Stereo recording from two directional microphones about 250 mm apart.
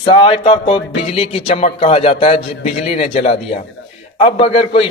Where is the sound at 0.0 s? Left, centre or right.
Left.